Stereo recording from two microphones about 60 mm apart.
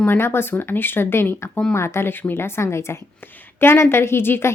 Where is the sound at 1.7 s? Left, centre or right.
Left.